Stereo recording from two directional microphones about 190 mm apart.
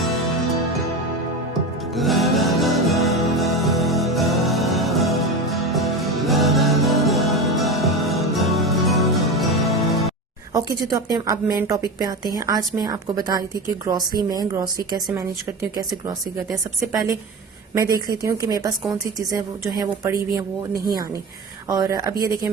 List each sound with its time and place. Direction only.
2.0 s music: centre (ahead or behind)
10.5 s a woman's voice: 20° right (ahead or behind)
16.5 s a woman's voice: centre (ahead or behind)
17.7 s a woman's voice: 20° right (ahead or behind)
19.7 s a woman's voice: 20° right (ahead or behind)
21.7 s a woman's voice: 15° right (ahead or behind)